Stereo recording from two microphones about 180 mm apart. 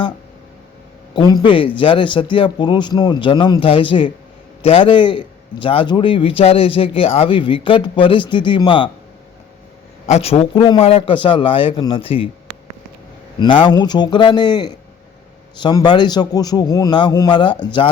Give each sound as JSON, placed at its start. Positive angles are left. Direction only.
{"t": 1.1, "sound": "a man's voice", "side_deg": 25}
{"t": 10.1, "sound": "a man's voice", "side_deg": 35}
{"t": 13.4, "sound": "a man's voice", "side_deg": 25}